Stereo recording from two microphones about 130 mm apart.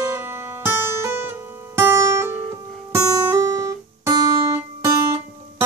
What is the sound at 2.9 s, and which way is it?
Guitar, 25° right (ahead or behind).